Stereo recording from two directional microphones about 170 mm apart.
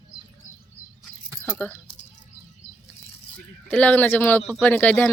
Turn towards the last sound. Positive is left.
turn(degrees=10)  # may be behind; listen again after turning